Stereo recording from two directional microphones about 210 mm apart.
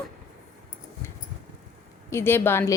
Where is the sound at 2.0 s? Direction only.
10° left (ahead or behind).